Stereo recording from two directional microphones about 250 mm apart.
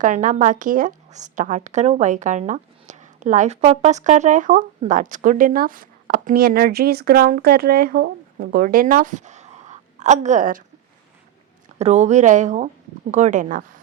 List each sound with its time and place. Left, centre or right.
0.0 s speech: right
11.8 s speech: right